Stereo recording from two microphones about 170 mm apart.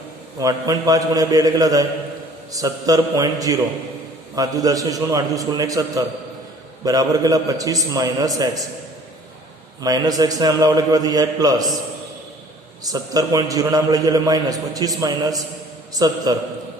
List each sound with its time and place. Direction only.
0.3 s a man's voice: 20° right (ahead or behind)
9.8 s a man's voice: 20° right (ahead or behind)
12.8 s a man's voice: 20° right (ahead or behind)